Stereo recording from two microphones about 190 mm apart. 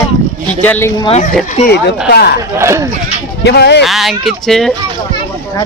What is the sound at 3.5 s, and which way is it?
Speech, 60° left (ahead or behind).